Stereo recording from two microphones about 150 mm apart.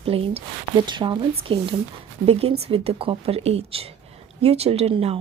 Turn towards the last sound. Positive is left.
turn(degrees=-40)  # may be behind; listen again after turning